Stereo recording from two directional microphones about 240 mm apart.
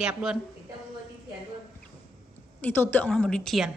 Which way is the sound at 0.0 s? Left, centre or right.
Centre.